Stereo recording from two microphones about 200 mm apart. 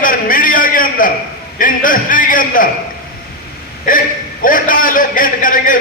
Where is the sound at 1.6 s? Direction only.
45° left (ahead or behind).